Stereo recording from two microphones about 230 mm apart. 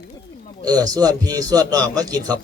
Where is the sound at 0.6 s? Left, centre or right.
Centre.